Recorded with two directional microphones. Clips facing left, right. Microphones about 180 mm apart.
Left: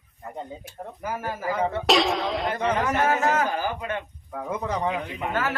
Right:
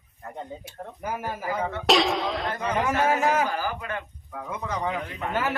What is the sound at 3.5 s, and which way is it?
Speech, 25° left (ahead or behind).